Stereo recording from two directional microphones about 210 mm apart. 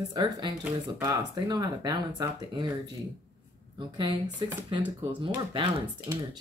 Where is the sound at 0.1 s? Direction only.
20° right (ahead or behind).